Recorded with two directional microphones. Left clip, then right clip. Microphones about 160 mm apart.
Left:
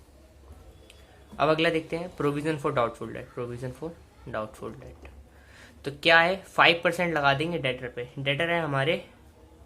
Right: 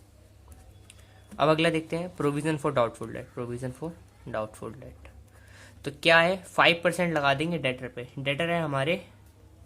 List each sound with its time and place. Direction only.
1.4 s speech: 30° right (ahead or behind)